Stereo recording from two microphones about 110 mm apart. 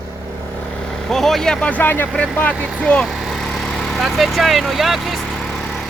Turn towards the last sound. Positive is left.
turn(degrees=0)  # may be behind; listen again after turning